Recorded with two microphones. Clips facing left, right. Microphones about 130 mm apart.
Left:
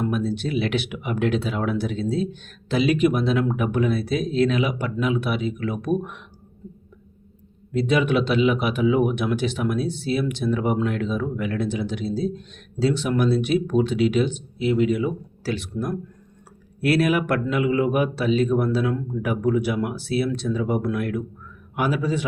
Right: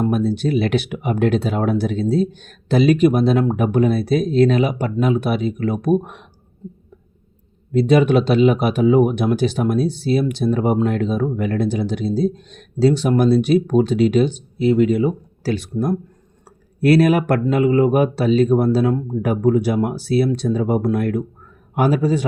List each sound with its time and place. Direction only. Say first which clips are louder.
0.0 s speech: right 6 dB; 40° right (ahead or behind)
7.7 s speech: right 6 dB; 40° right (ahead or behind)